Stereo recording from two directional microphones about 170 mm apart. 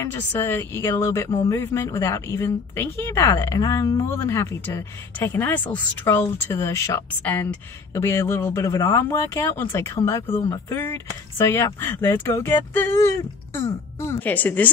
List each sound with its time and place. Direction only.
0.0 s speech: 15° left (ahead or behind)